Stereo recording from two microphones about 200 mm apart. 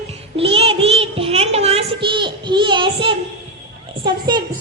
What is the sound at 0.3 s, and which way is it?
Child singing, 30° right (ahead or behind).